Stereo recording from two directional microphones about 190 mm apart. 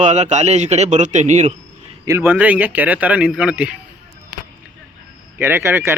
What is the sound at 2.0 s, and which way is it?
Speech, 15° right (ahead or behind).